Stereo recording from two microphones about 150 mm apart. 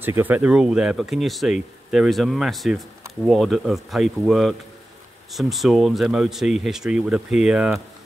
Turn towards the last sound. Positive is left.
turn(degrees=-5)  # may be behind; listen again after turning